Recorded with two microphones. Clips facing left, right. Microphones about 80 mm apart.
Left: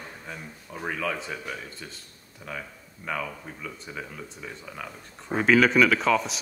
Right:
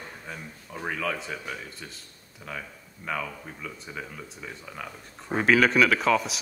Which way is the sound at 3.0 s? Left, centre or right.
Centre.